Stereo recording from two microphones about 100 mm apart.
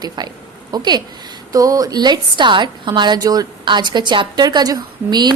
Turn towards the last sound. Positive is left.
turn(degrees=-45)  # may be behind; listen again after turning